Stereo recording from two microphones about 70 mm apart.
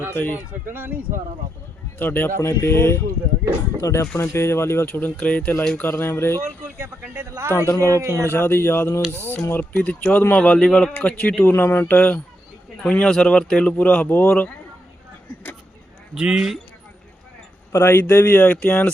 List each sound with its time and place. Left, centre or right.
0.1 s speech: left
0.3 s speech: right
2.0 s speech: left
3.8 s speech: left
4.2 s speech: left
5.1 s speech: centre; by 6.4 s left
6.7 s a sound: right
7.5 s speech: left
7.9 s a man's voice: right
8.3 s speech: left
11.5 s speech: left
16.1 s speech: centre
17.7 s speech: left
18.4 s speech: left